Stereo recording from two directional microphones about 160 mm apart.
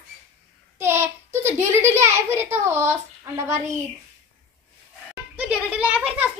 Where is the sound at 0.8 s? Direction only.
15° right (ahead or behind).